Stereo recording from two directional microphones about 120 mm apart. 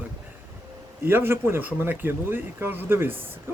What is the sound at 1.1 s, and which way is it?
Speech, 20° right (ahead or behind).